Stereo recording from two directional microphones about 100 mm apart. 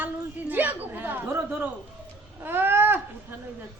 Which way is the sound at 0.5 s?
20° right (ahead or behind).